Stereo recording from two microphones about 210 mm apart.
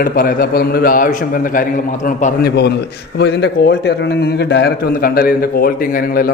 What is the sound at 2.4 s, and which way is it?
A man's voice, 50° left (ahead or behind).